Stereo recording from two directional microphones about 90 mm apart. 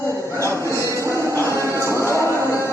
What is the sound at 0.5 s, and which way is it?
Music, 30° left (ahead or behind).